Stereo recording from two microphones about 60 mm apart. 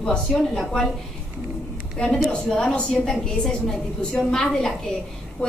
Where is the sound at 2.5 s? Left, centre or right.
Centre.